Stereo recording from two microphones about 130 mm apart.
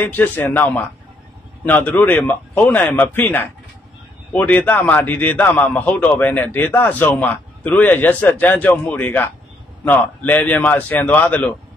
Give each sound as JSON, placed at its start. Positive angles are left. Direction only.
{"t": 0.0, "sound": "a man's voice", "side_deg": 15}